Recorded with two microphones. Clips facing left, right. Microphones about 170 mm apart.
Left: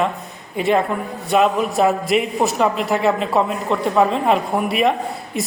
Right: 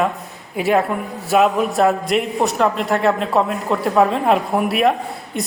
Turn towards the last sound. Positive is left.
turn(degrees=0)  # may be behind; listen again after turning